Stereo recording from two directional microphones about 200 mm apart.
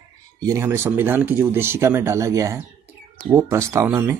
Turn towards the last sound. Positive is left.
turn(degrees=-10)  # may be behind; listen again after turning